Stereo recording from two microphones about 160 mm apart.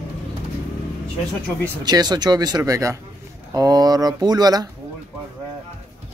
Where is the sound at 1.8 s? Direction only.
25° right (ahead or behind).